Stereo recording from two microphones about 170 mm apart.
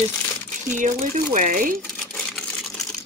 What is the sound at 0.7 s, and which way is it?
Speech, 45° right (ahead or behind).